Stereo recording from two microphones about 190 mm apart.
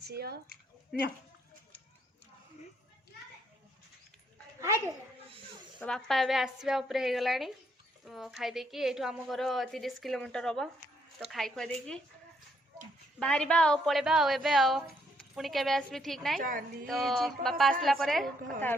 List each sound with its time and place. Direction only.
0.1 s speech: 55° right (ahead or behind)
5.8 s a woman's voice: centre (ahead or behind)
13.1 s a woman's voice: 5° left (ahead or behind)
16.4 s a woman's voice: 45° right (ahead or behind)
16.8 s a woman's voice: centre (ahead or behind)